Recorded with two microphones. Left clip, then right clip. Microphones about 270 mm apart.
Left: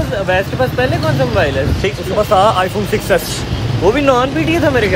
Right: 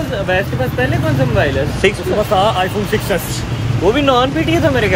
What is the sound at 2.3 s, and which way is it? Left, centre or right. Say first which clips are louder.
Speech: left 4 dB; centre.